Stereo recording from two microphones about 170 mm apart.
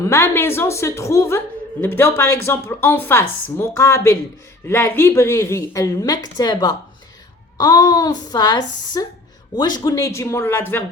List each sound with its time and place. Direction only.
0.0 s a woman's voice: 15° left (ahead or behind)